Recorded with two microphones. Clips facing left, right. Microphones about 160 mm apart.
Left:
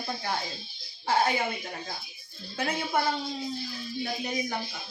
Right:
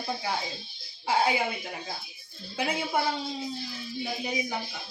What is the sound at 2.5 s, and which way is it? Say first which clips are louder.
Speech: right 1 dB; 10° right (ahead or behind).